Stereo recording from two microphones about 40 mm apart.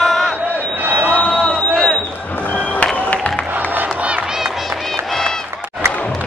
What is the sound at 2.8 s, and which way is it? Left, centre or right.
Music, left.